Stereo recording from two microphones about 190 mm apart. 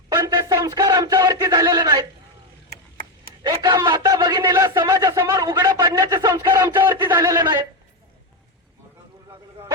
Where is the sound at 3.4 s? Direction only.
20° right (ahead or behind).